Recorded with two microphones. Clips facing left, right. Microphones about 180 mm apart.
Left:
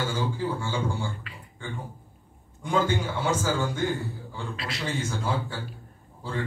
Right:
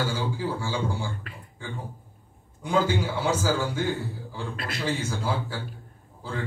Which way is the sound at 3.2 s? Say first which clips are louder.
Right 1 dB; 10° right (ahead or behind).